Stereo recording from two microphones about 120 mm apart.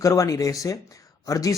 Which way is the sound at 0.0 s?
30° left (ahead or behind).